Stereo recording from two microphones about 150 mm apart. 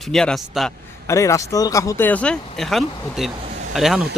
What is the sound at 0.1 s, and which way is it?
Speech, 5° left (ahead or behind).